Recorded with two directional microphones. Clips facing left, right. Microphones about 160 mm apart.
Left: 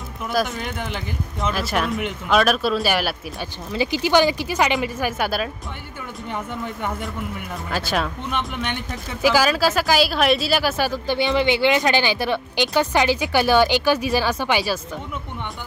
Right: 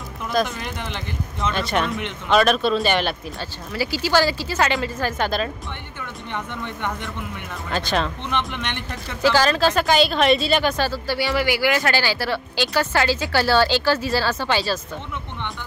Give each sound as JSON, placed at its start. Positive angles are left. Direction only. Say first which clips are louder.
{"t": 0.3, "sound": "speech", "louder": "even", "side_deg": 5}
{"t": 3.3, "sound": "speech", "louder": "left 2 dB", "side_deg": 20}
{"t": 7.7, "sound": "speech", "louder": "right 1 dB", "side_deg": 5}
{"t": 10.9, "sound": "speech", "louder": "left 2 dB", "side_deg": 20}